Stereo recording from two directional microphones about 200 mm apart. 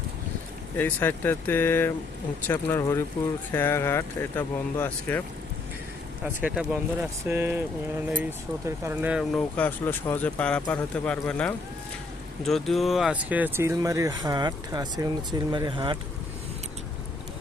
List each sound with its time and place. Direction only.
0.8 s speech: 10° left (ahead or behind)
6.2 s speech: 5° right (ahead or behind)
8.6 s speech: 10° right (ahead or behind)
9.6 s speech: 10° left (ahead or behind); by 16.0 s 25° right (ahead or behind)